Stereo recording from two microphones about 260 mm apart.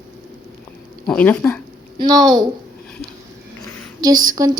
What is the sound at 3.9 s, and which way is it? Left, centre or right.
Speech, centre.